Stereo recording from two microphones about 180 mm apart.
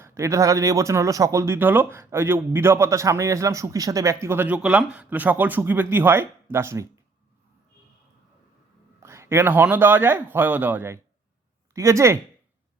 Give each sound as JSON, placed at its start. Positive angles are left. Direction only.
{"t": 0.0, "sound": "speech", "side_deg": -15}
{"t": 9.0, "sound": "speech", "side_deg": -15}